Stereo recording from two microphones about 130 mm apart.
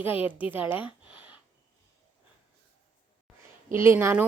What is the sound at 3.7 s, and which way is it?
Speech, 20° right (ahead or behind).